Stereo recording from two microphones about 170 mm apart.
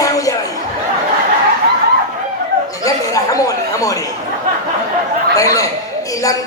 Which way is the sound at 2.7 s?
20° left (ahead or behind).